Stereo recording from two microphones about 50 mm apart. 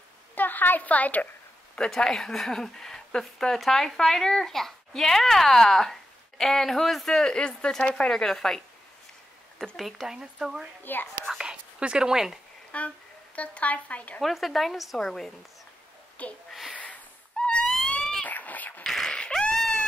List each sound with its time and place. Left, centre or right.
0.4 s a woman's voice: left
2.0 s a woman's voice: centre
9.8 s a woman's voice: centre
10.1 s speech: centre
10.8 s a child's voice: left
11.2 s speech: centre
12.7 s speech: left
14.2 s a woman's voice: centre
16.2 s a woman's voice: left
16.7 s a sound: left
17.4 s a sound: centre
18.2 s cat: left
18.9 s a sound: centre